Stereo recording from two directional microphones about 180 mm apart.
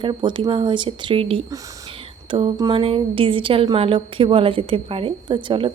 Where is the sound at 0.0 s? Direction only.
25° right (ahead or behind).